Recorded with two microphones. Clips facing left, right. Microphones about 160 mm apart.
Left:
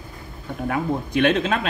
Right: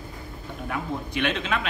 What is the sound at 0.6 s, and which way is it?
Speech, 50° left (ahead or behind).